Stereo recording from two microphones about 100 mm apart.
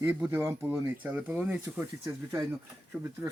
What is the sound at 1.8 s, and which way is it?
Speech, 25° right (ahead or behind).